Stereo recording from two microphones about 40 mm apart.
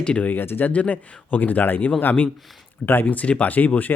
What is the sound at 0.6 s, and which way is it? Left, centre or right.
Speech, left.